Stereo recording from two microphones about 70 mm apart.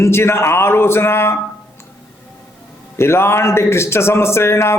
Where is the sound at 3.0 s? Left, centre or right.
Left.